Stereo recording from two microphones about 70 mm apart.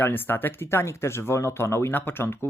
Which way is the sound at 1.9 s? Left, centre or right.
Left.